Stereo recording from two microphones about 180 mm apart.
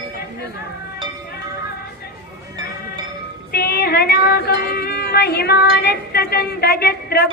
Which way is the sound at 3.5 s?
55° left (ahead or behind).